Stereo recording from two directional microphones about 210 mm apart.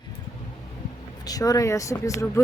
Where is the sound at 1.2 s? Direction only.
15° left (ahead or behind).